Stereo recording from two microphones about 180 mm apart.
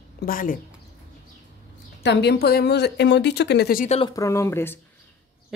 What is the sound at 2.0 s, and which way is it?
Speech, 65° left (ahead or behind).